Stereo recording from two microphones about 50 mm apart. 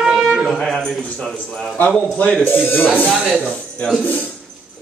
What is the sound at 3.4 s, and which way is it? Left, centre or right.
Speech, left.